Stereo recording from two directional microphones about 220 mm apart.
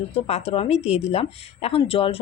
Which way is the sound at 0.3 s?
30° left (ahead or behind).